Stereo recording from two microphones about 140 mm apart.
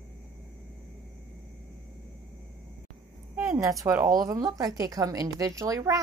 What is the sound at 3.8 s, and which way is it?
Speech, 20° right (ahead or behind).